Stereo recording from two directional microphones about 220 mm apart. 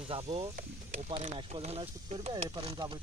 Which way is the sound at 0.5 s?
35° right (ahead or behind).